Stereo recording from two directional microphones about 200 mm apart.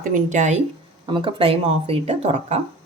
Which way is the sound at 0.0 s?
40° right (ahead or behind).